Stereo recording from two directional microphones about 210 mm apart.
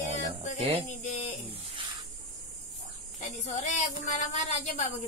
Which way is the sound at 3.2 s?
35° left (ahead or behind).